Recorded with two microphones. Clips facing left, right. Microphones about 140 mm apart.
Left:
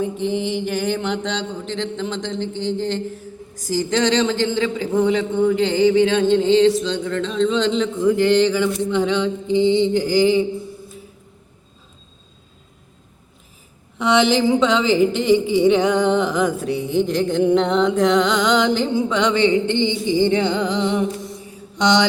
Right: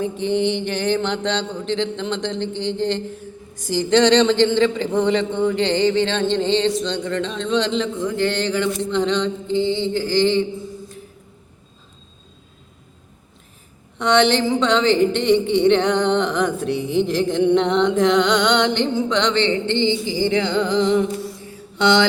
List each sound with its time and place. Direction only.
0.0 s speech: 5° left (ahead or behind)
14.0 s speech: 5° left (ahead or behind)
20.7 s music: 10° left (ahead or behind)
21.8 s mantra: 15° left (ahead or behind)